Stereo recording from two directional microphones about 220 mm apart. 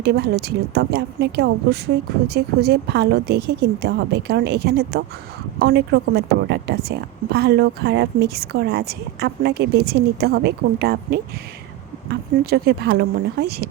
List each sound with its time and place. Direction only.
0.0 s a woman's voice: 50° right (ahead or behind)